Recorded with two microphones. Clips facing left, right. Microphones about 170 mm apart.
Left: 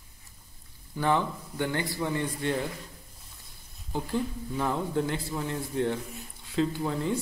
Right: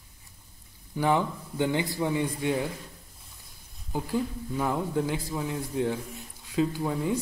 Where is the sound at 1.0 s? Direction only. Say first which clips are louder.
Right 1 dB; 15° right (ahead or behind).